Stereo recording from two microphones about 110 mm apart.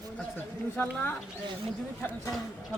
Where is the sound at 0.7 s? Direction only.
20° left (ahead or behind).